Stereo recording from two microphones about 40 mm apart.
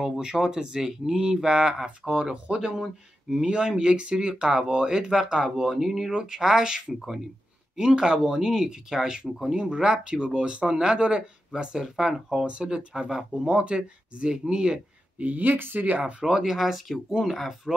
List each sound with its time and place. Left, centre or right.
0.2 s speech: centre
12.6 s speech: centre
13.5 s speech: right
15.1 s speech: right
16.0 s speech: right
16.3 s speech: centre
16.5 s speech: centre